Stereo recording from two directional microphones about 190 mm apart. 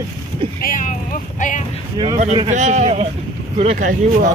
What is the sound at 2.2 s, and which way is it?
Speech, 35° right (ahead or behind).